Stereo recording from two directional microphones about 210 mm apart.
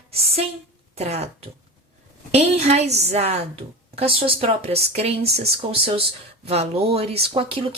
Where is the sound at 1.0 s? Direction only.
30° right (ahead or behind).